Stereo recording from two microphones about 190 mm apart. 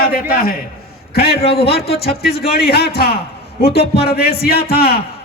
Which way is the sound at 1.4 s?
30° left (ahead or behind).